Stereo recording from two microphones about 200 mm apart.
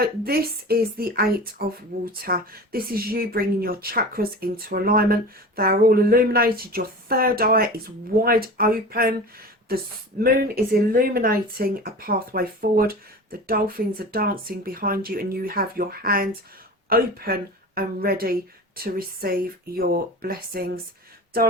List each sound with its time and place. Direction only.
0.0 s speech: 50° right (ahead or behind)